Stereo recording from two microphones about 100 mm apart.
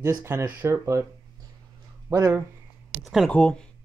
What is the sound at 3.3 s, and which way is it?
Speech, 10° left (ahead or behind).